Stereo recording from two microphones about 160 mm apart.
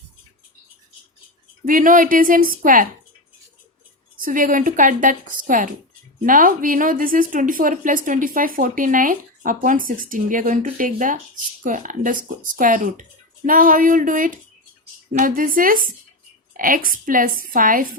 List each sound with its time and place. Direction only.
1.6 s a woman's voice: 55° right (ahead or behind)
4.2 s a woman's voice: 55° right (ahead or behind)